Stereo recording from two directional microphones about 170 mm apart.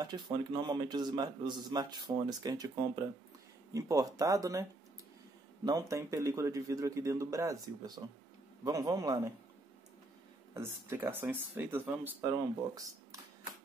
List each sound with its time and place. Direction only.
0.0 s a man's voice: 25° right (ahead or behind)
5.7 s a man's voice: 20° right (ahead or behind)
10.5 s speech: 15° right (ahead or behind)